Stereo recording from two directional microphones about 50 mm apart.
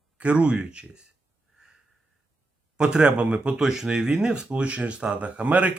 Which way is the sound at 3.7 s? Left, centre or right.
Centre.